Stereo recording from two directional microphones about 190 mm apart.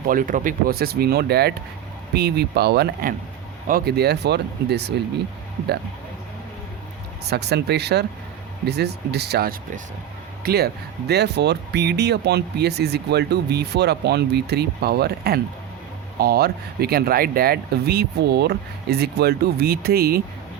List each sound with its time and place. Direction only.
0.1 s speech: 45° right (ahead or behind); by 4.9 s 60° right (ahead or behind)
7.3 s speech: 60° right (ahead or behind)